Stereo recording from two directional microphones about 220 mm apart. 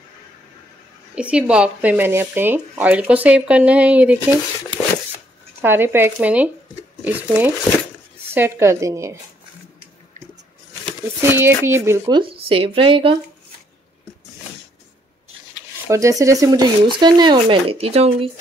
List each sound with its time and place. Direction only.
1.1 s speech: 5° right (ahead or behind)
5.6 s speech: 10° right (ahead or behind)
11.1 s speech: 10° right (ahead or behind)
12.2 s speech: 25° right (ahead or behind)
15.9 s speech: 15° right (ahead or behind)